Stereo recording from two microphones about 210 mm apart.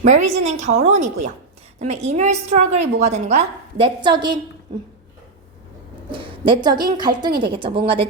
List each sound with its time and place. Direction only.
0.0 s a woman's voice: 35° right (ahead or behind)
6.1 s a woman's voice: 25° right (ahead or behind)